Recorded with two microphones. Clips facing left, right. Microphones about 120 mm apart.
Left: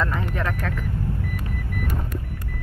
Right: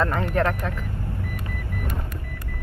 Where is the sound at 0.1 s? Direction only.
55° right (ahead or behind).